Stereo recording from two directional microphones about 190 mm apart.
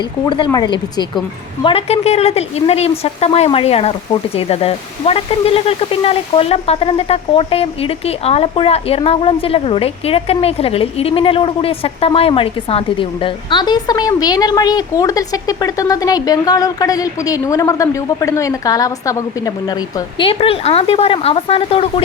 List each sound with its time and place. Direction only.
0.3 s speech: 25° left (ahead or behind)
20.1 s speech: 30° left (ahead or behind)